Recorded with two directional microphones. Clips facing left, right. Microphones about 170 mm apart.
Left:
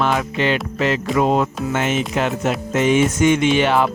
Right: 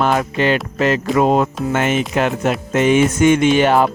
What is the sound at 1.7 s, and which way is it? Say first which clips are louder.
Speech: right 3 dB; 55° right (ahead or behind).